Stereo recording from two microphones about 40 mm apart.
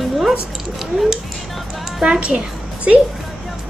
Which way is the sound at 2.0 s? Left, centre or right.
Right.